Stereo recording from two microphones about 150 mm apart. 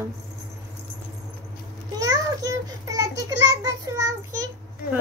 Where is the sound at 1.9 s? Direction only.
25° right (ahead or behind).